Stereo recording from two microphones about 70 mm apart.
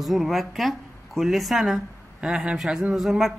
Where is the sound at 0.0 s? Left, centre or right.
Centre.